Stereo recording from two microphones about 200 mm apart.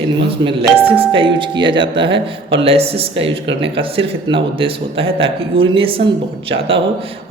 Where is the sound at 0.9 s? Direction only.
25° right (ahead or behind).